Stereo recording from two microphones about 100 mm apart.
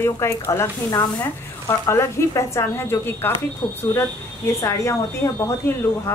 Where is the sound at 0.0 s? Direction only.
25° left (ahead or behind).